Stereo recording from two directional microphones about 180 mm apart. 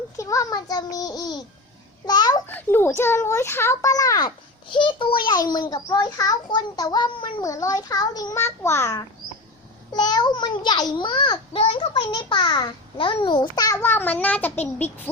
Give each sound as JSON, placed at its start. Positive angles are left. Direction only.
{"t": 0.2, "sound": "a child's voice", "side_deg": 15}
{"t": 2.5, "sound": "a child's voice", "side_deg": 10}